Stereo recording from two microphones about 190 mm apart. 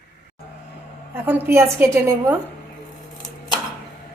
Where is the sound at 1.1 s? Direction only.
10° right (ahead or behind).